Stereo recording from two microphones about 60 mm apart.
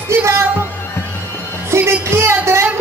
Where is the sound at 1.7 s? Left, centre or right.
Right.